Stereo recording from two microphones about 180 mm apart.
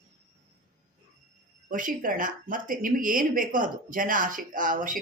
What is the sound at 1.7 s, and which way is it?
Speech, 50° right (ahead or behind).